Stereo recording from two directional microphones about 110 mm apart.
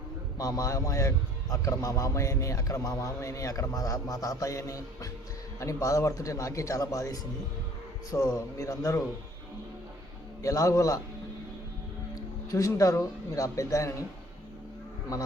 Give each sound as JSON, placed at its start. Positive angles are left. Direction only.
{"t": 0.3, "sound": "a man's voice", "side_deg": 30}
{"t": 10.4, "sound": "a man's voice", "side_deg": 30}
{"t": 12.5, "sound": "a man's voice", "side_deg": 30}